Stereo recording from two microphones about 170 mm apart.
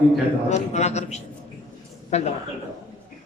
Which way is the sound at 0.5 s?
40° left (ahead or behind).